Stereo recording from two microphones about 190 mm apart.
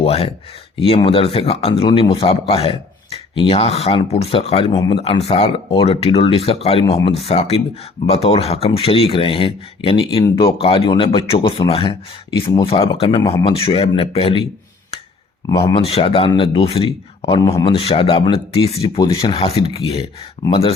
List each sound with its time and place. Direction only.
0.0 s speech: 30° left (ahead or behind)
15.5 s speech: 30° left (ahead or behind)